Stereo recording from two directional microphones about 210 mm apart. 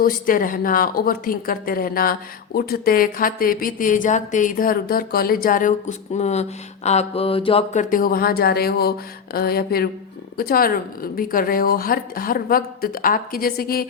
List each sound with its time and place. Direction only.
0.0 s a woman's voice: 40° left (ahead or behind)